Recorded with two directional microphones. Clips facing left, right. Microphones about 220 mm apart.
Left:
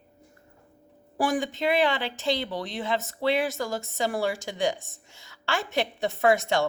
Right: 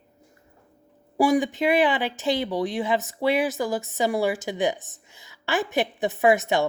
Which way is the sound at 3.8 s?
15° right (ahead or behind).